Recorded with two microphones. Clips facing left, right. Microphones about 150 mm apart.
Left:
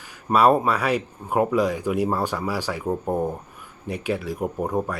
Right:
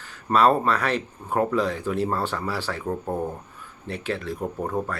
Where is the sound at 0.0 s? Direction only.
10° left (ahead or behind).